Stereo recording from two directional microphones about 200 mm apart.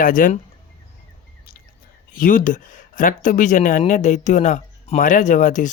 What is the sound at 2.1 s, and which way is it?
Speech, 45° left (ahead or behind).